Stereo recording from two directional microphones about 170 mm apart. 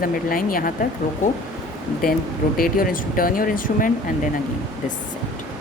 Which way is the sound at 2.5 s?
55° left (ahead or behind).